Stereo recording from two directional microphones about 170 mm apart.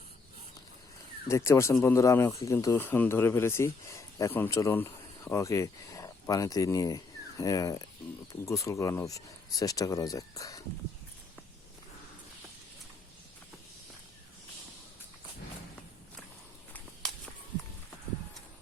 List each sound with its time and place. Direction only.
1.3 s speech: 15° left (ahead or behind)
17.0 s whip: 5° left (ahead or behind)